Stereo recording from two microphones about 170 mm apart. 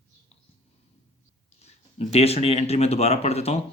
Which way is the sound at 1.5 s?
40° left (ahead or behind).